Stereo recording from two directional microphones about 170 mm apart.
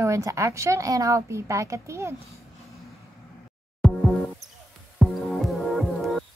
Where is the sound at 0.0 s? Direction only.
20° right (ahead or behind).